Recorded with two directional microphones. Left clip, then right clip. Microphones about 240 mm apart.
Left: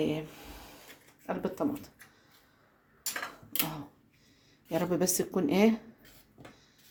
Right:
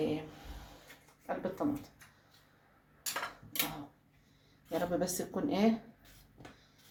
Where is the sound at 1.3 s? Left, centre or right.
Left.